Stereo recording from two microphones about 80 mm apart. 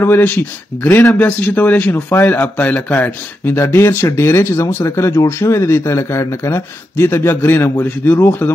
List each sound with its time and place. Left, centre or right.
0.0 s speech: left
1.1 s speech: left